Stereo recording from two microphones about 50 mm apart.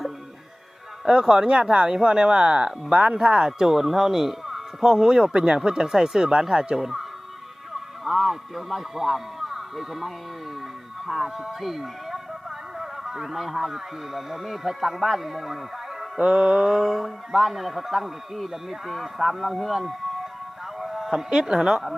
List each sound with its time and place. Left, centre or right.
1.0 s a man's voice: centre
16.2 s speech: right